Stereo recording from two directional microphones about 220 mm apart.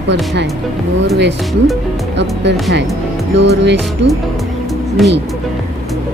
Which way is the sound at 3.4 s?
50° right (ahead or behind).